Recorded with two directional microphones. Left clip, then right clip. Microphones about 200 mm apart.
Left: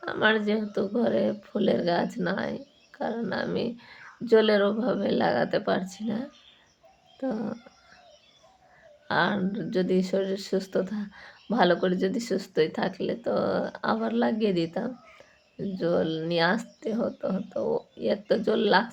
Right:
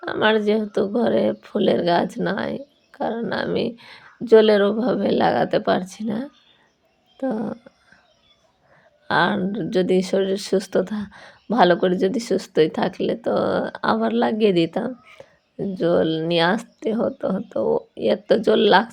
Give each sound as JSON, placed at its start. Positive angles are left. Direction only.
{"t": 0.0, "sound": "speech", "side_deg": -30}
{"t": 9.0, "sound": "speech", "side_deg": -35}